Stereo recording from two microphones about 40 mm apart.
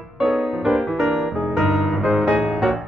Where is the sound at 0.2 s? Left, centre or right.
Centre.